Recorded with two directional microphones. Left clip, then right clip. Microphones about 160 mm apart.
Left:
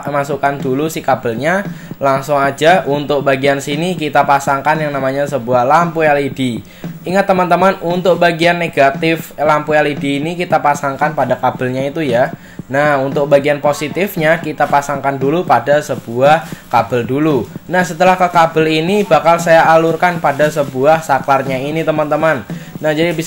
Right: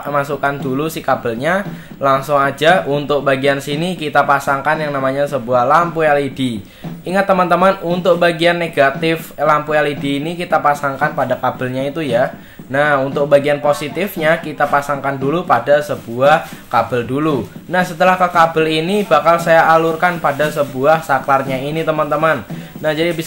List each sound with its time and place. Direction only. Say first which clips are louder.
0.1 s speech: left 2 dB; 15° left (ahead or behind)